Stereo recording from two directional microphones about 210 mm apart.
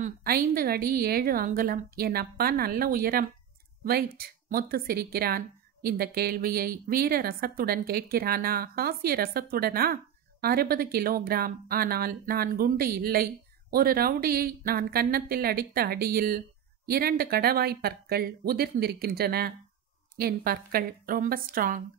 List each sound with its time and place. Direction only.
0.0 s speech: 45° right (ahead or behind)